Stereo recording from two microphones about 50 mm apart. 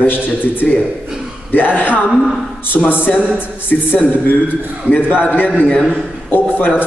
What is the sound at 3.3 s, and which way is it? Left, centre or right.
A man's voice, left.